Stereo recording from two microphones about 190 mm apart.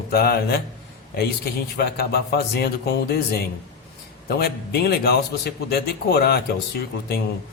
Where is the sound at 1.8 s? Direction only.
55° left (ahead or behind).